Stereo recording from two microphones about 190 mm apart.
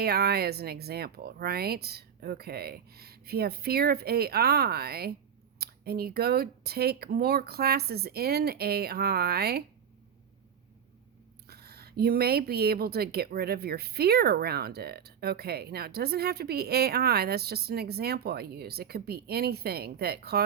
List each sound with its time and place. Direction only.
0.0 s speech: 55° right (ahead or behind)
11.4 s speech: 55° right (ahead or behind)